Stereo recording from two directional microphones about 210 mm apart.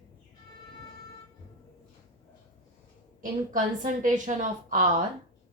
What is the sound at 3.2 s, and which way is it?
A woman's voice, 40° right (ahead or behind).